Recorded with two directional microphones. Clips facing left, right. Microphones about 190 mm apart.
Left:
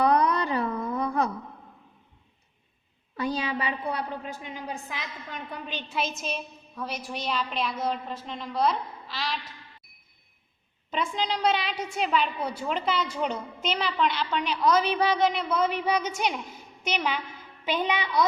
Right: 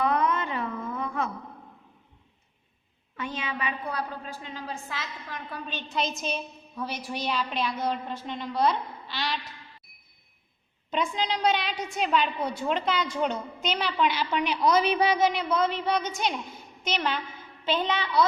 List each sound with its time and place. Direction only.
0.0 s a sound: 35° left (ahead or behind)
3.2 s a woman's voice: 35° left (ahead or behind); by 9.4 s centre (ahead or behind)
10.9 s a woman's voice: centre (ahead or behind)
15.3 s a woman's voice: 5° left (ahead or behind)